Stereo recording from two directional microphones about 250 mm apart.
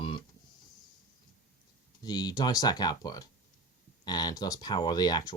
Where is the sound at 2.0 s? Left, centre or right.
Centre.